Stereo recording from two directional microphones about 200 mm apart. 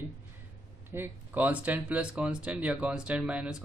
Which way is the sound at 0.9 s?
10° right (ahead or behind).